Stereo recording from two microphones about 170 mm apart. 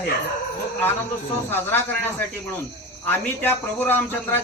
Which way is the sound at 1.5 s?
10° left (ahead or behind).